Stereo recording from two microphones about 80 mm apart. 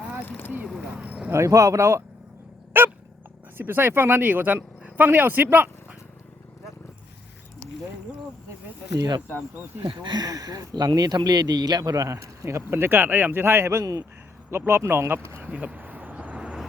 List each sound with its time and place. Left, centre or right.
0.3 s a sound: left
0.9 s a sound: centre
1.3 s speech: right
2.8 s dog: right
3.6 s speech: right
9.0 s speech: right
9.8 s speech: right
15.4 s vehicle: centre